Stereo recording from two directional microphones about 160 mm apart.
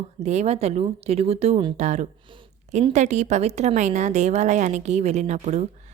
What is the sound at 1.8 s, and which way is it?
A woman's voice, 45° right (ahead or behind).